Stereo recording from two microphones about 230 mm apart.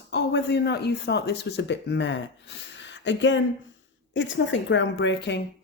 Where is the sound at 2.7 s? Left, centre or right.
Left.